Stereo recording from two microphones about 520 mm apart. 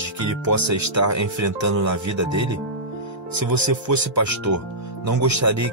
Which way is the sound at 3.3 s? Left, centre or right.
Right.